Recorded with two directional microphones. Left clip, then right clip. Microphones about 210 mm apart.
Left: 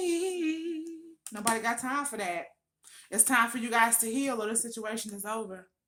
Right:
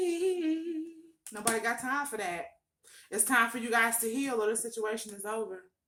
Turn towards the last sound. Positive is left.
turn(degrees=45)  # may be behind; listen again after turning